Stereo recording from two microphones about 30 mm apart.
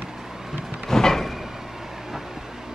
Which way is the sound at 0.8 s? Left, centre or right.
Centre.